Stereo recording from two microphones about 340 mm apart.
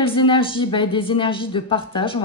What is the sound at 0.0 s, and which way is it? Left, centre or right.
A woman's voice, centre.